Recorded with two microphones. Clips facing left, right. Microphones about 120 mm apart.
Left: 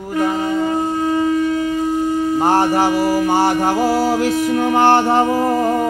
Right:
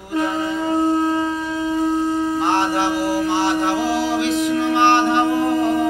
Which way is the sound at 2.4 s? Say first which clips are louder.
Left 6 dB; 45° left (ahead or behind).